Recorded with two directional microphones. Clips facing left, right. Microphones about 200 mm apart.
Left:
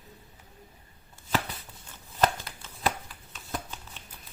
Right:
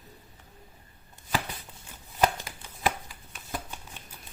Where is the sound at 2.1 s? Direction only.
10° right (ahead or behind).